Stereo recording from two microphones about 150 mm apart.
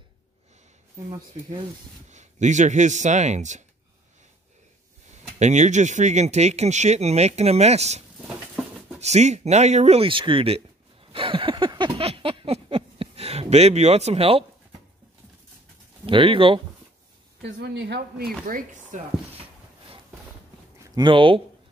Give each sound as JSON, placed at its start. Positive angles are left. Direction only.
{"t": 2.0, "sound": "speech", "side_deg": -50}
{"t": 5.4, "sound": "speech", "side_deg": -50}
{"t": 9.0, "sound": "speech", "side_deg": -50}
{"t": 11.1, "sound": "a sound", "side_deg": -35}
{"t": 16.1, "sound": "speech", "side_deg": -35}
{"t": 17.6, "sound": "speech", "side_deg": -90}
{"t": 18.5, "sound": "speech", "side_deg": -55}
{"t": 20.8, "sound": "speech", "side_deg": -30}